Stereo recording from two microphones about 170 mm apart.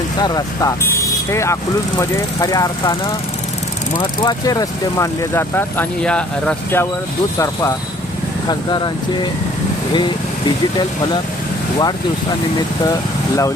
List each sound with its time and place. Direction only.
0.2 s speech: 20° left (ahead or behind)
3.9 s speech: 25° left (ahead or behind)
10.8 s speech: 25° left (ahead or behind)
12.8 s speech: 20° left (ahead or behind)